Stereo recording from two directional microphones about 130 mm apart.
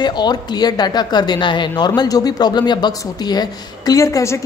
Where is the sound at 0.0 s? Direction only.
35° left (ahead or behind).